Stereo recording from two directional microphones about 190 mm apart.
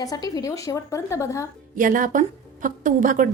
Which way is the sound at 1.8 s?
45° right (ahead or behind).